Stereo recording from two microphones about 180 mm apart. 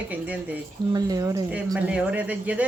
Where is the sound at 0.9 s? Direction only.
20° right (ahead or behind).